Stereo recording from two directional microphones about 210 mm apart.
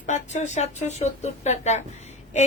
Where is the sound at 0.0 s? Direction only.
35° left (ahead or behind).